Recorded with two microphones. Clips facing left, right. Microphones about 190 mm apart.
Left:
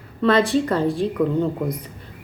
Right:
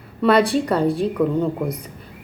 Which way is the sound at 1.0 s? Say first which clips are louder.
Right 1 dB; centre (ahead or behind).